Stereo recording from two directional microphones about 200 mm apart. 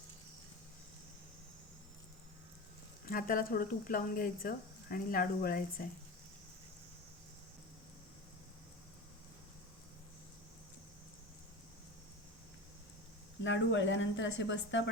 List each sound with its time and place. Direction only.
3.1 s speech: 45° left (ahead or behind)
13.4 s speech: 70° left (ahead or behind)